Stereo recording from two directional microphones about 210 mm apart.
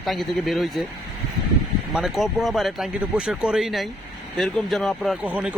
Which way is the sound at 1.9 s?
Centre (ahead or behind).